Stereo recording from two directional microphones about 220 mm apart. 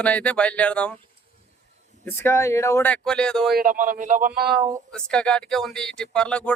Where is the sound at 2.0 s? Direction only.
10° left (ahead or behind).